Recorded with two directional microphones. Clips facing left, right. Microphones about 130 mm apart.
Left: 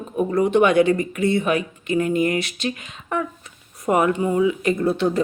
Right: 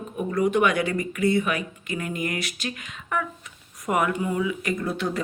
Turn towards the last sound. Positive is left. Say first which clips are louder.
# left 7 dB
turn(degrees=25)  # may be behind; listen again after turning